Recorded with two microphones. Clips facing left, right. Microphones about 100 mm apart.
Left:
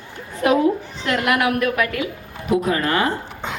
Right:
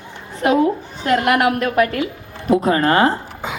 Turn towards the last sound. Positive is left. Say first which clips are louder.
# right 5 dB
turn(degrees=-35)  # may be behind; listen again after turning